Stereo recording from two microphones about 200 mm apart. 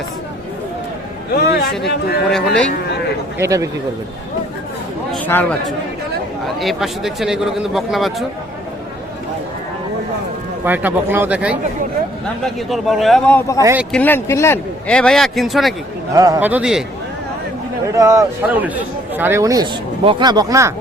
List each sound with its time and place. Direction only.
1.3 s a man's voice: 55° left (ahead or behind)
3.3 s a man's voice: 15° right (ahead or behind)
5.1 s a man's voice: 10° left (ahead or behind)
6.6 s speech: centre (ahead or behind)
10.6 s a man's voice: 10° right (ahead or behind); by 13.6 s 5° left (ahead or behind)
13.6 s a man's voice: 15° right (ahead or behind)
13.9 s speech: 10° left (ahead or behind)
16.1 s a man's voice: 15° right (ahead or behind)
16.5 s speech: 5° right (ahead or behind)
17.9 s a man's voice: 15° right (ahead or behind)